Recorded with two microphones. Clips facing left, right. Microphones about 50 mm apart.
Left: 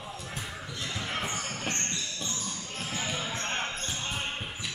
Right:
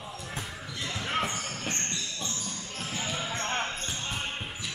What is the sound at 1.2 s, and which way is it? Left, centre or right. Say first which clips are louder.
Basketball bounce: even; centre.